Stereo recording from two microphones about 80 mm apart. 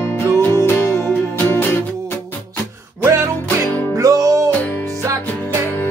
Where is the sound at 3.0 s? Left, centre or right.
Right.